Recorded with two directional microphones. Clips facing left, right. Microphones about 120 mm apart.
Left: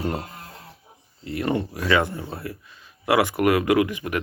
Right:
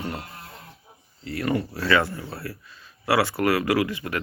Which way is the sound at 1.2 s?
25° left (ahead or behind).